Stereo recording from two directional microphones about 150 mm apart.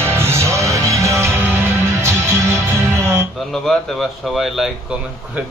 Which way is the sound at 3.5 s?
Centre (ahead or behind).